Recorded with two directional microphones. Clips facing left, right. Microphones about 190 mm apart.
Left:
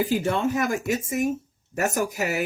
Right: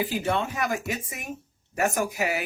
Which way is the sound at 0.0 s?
45° left (ahead or behind).